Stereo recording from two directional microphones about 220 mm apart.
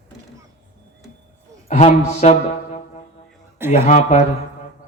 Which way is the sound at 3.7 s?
30° left (ahead or behind).